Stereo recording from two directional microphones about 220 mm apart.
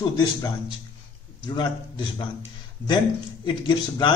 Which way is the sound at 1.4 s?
20° left (ahead or behind).